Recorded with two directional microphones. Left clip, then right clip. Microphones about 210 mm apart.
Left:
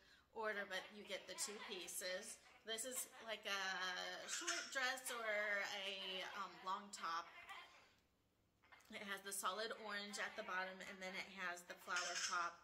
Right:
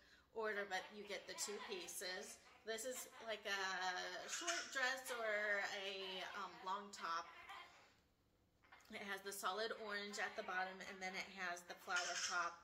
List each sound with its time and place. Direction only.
0.4 s a woman's voice: 10° left (ahead or behind)
8.9 s a woman's voice: 5° left (ahead or behind)